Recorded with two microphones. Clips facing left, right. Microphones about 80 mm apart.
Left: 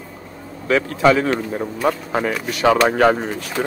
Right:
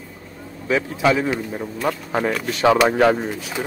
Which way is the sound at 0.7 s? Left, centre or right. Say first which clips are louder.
Left 3 dB; left.